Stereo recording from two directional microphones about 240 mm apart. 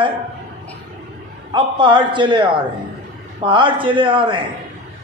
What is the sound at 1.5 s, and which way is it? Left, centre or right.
A man's voice, centre.